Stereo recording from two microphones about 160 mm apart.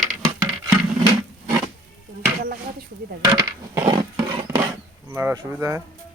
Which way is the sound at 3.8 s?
30° right (ahead or behind).